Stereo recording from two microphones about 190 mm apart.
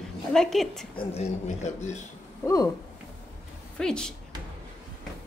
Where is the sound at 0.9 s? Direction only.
35° left (ahead or behind).